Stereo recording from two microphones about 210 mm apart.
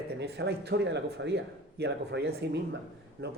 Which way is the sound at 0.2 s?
55° right (ahead or behind).